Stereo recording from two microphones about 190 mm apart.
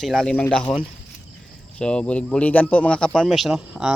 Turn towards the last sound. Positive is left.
turn(degrees=-5)  # may be behind; listen again after turning